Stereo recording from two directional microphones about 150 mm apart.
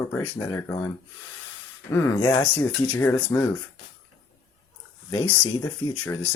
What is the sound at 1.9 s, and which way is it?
Speech, 15° left (ahead or behind).